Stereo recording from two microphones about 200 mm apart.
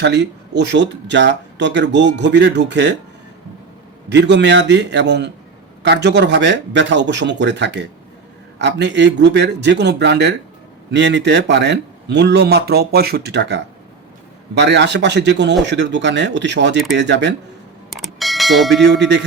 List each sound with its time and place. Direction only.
0.0 s speech: 60° right (ahead or behind)
4.1 s speech: 60° right (ahead or behind)
17.9 s bell: centre (ahead or behind)
18.9 s speech: 60° right (ahead or behind)